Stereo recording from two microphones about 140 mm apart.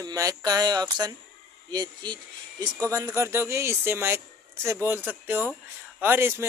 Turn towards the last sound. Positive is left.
turn(degrees=-15)  # may be behind; listen again after turning